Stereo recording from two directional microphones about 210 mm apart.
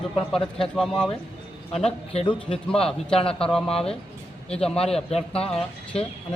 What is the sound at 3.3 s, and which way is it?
Speech, 5° left (ahead or behind).